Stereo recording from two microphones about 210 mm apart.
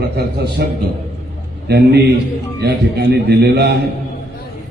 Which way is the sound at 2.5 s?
55° right (ahead or behind).